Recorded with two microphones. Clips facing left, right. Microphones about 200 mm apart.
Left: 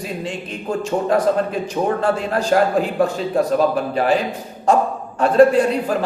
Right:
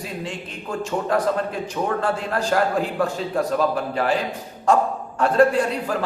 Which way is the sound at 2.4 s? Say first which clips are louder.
Left 4 dB; 20° left (ahead or behind).